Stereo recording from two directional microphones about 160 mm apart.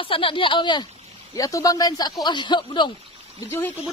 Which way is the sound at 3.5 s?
10° left (ahead or behind).